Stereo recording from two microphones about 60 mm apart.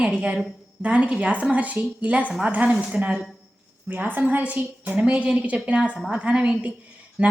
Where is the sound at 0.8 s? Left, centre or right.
Right.